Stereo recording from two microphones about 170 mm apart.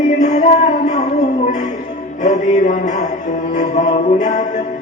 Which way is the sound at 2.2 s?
45° left (ahead or behind).